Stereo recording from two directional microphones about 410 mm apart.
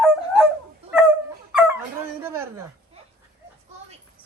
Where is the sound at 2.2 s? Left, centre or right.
Centre.